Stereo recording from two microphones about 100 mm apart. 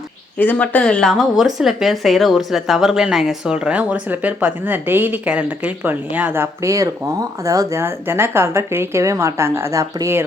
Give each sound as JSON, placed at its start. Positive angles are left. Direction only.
{"t": 0.3, "sound": "speech", "side_deg": 15}